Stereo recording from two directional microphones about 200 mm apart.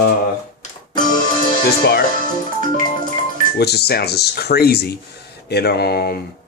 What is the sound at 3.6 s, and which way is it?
Speech, 55° left (ahead or behind).